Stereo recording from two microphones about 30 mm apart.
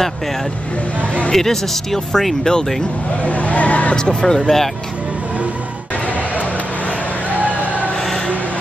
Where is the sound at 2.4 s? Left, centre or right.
Left.